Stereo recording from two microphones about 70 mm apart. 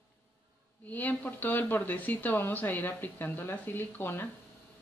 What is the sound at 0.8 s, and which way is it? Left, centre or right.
Speech, left.